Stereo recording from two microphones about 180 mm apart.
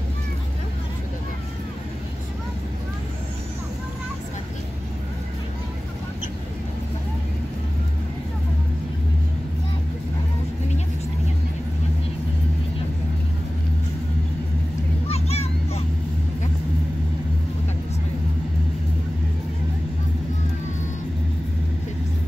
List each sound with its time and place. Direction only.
15.0 s vehicle: 35° left (ahead or behind)